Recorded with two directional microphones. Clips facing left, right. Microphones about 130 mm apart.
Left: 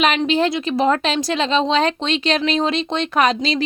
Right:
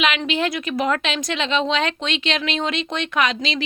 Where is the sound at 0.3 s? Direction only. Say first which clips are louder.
Left 5 dB; 35° left (ahead or behind).